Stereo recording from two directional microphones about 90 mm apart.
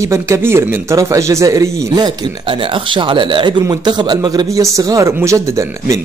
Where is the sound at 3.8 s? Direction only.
55° right (ahead or behind).